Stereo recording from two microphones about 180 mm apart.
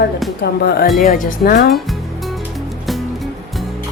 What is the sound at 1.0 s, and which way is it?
Speech, 50° left (ahead or behind).